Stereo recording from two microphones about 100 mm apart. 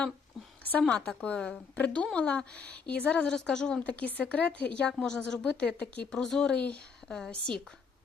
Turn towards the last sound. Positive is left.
turn(degrees=10)  # may be behind; listen again after turning